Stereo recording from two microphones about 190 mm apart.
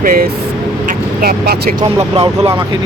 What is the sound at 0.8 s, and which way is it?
Vehicle, 50° right (ahead or behind).